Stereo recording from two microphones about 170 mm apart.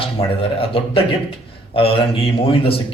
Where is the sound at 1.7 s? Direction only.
30° left (ahead or behind).